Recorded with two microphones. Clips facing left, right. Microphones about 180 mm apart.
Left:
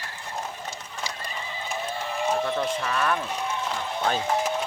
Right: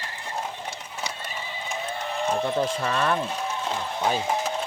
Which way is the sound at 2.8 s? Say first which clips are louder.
Right 2 dB; 30° right (ahead or behind).